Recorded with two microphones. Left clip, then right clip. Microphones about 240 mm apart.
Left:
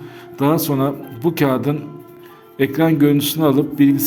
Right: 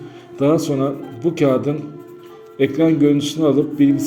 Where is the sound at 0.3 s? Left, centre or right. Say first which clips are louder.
Right 1 dB; left.